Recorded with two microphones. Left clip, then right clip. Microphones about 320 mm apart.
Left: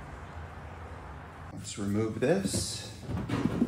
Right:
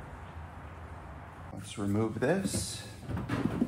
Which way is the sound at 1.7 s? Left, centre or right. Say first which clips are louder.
Even; centre.